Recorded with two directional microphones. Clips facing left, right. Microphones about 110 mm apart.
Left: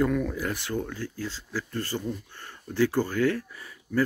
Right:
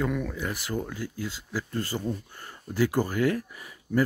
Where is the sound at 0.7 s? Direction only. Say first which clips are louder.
Left 1 dB; 10° right (ahead or behind).